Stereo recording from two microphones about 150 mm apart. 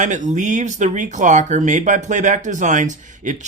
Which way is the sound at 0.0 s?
55° right (ahead or behind).